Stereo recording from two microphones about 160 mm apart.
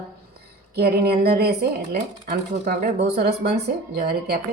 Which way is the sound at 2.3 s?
65° right (ahead or behind).